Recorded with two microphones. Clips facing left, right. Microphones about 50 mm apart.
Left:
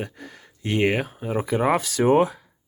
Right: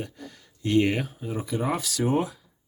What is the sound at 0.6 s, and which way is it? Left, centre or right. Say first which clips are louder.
Speech: left 1 dB; left.